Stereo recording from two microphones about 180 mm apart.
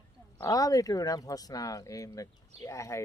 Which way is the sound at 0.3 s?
20° left (ahead or behind).